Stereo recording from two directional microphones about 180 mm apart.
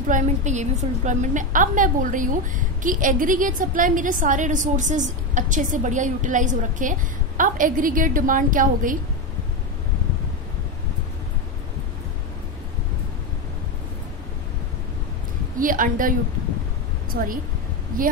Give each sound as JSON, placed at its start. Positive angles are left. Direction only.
{"t": 0.1, "sound": "a woman's voice", "side_deg": -45}
{"t": 15.6, "sound": "a woman's voice", "side_deg": -50}